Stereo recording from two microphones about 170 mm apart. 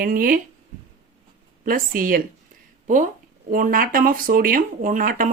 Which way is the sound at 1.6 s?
55° right (ahead or behind).